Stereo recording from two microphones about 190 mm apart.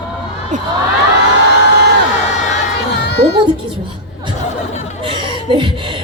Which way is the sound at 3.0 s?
60° left (ahead or behind).